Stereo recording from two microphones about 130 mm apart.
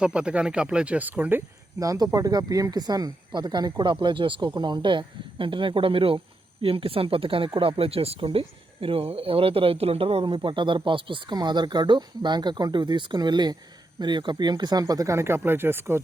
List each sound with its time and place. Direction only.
0.0 s speech: 10° right (ahead or behind)